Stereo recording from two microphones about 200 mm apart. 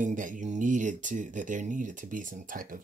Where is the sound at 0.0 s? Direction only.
40° right (ahead or behind).